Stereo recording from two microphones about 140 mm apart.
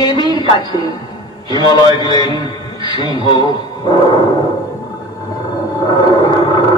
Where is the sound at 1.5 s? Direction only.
30° left (ahead or behind).